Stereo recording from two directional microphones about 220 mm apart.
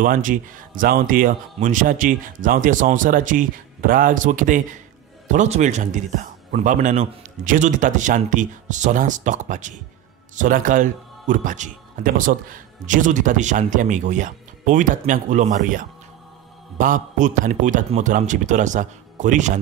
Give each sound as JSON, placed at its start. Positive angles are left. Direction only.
{"t": 0.0, "sound": "speech", "side_deg": -35}